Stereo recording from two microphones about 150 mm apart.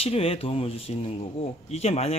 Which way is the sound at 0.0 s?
40° left (ahead or behind).